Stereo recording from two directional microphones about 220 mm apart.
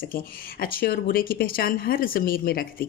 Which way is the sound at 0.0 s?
40° left (ahead or behind).